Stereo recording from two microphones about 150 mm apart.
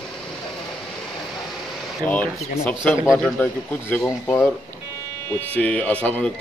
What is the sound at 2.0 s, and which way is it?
A man's voice, 10° left (ahead or behind).